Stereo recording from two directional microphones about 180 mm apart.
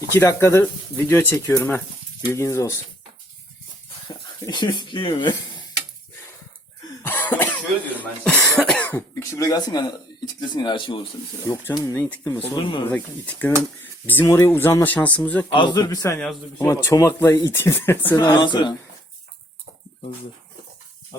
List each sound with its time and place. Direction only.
0.1 s speech: 15° left (ahead or behind)
4.4 s speech: 25° left (ahead or behind)
7.0 s cough: 10° left (ahead or behind)
8.2 s speech: 5° left (ahead or behind); by 11.0 s 30° left (ahead or behind)
11.4 s speech: 15° left (ahead or behind)
12.4 s speech: 30° left (ahead or behind)
12.9 s speech: 10° left (ahead or behind)
15.5 s speech: 25° left (ahead or behind)
18.2 s speech: 25° left (ahead or behind)